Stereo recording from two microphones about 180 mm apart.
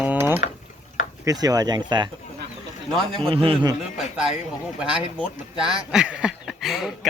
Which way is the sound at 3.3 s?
30° right (ahead or behind).